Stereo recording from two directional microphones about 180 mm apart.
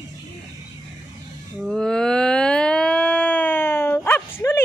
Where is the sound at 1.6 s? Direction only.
Centre (ahead or behind).